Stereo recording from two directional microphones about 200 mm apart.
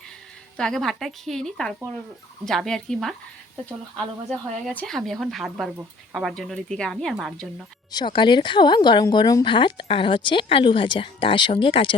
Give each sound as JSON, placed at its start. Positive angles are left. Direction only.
{"t": 0.5, "sound": "speech", "side_deg": 5}
{"t": 7.9, "sound": "speech", "side_deg": 25}